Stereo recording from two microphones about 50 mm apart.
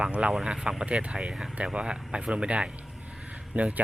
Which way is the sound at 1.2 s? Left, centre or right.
Centre.